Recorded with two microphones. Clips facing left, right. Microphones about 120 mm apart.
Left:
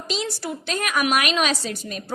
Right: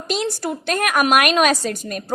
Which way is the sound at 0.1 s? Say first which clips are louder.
Right 5 dB; 50° right (ahead or behind).